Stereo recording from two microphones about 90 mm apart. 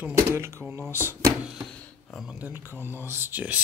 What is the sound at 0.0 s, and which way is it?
Speech, 30° right (ahead or behind).